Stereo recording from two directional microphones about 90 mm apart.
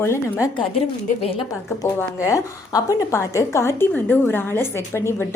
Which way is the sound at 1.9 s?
35° left (ahead or behind).